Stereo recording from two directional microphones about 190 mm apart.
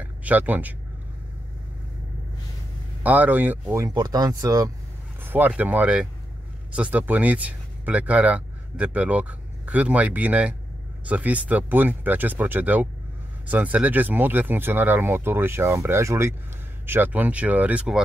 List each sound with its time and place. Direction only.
0.0 s speech: 10° right (ahead or behind)
3.0 s speech: 10° right (ahead or behind)